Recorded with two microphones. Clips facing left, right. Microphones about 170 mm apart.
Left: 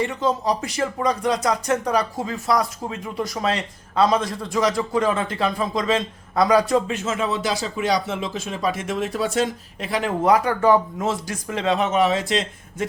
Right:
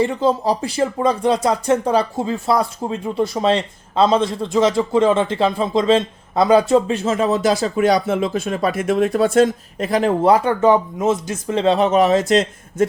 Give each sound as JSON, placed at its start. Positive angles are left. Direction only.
{"t": 0.0, "sound": "speech", "side_deg": -30}